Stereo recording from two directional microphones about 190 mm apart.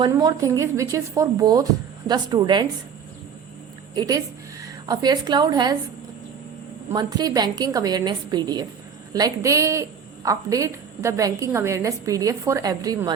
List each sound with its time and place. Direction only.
0.0 s a woman's voice: 20° right (ahead or behind)
3.9 s a woman's voice: 20° right (ahead or behind)
6.9 s a woman's voice: 20° right (ahead or behind)